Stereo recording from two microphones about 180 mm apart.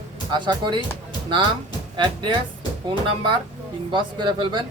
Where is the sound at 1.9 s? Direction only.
25° right (ahead or behind).